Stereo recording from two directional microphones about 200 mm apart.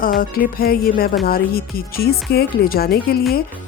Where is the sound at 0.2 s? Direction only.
45° left (ahead or behind).